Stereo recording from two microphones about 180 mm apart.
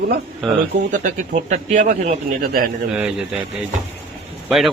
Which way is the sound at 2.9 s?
5° right (ahead or behind).